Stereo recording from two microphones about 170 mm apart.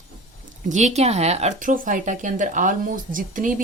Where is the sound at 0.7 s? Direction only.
45° right (ahead or behind).